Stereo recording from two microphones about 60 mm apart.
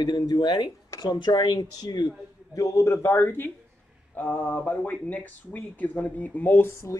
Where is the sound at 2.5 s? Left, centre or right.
Left.